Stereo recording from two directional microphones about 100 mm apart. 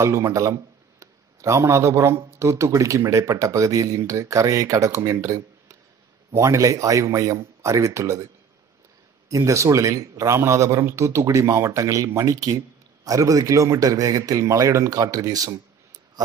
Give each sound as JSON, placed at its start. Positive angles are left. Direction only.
{"t": 0.0, "sound": "a man's voice", "side_deg": -30}
{"t": 9.3, "sound": "a man's voice", "side_deg": -30}